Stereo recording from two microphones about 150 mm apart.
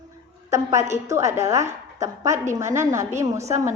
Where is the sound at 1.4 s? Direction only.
20° right (ahead or behind).